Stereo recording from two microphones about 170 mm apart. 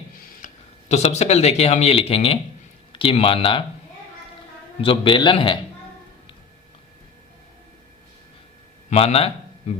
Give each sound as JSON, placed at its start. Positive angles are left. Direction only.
{"t": 0.4, "sound": "speech", "side_deg": 40}
{"t": 4.8, "sound": "a man's voice", "side_deg": 30}
{"t": 8.9, "sound": "speech", "side_deg": 40}